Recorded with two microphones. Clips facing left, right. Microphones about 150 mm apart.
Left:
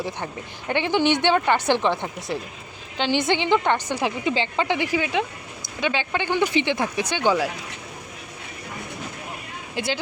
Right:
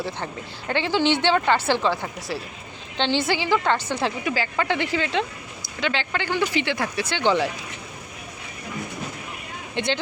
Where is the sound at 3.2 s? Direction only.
20° left (ahead or behind).